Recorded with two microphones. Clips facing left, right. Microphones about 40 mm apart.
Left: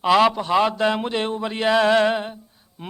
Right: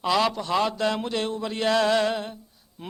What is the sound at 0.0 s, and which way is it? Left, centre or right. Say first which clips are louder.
A man's voice: left 6 dB; left.